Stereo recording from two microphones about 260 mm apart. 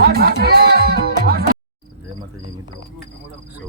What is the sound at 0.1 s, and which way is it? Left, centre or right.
Music, right.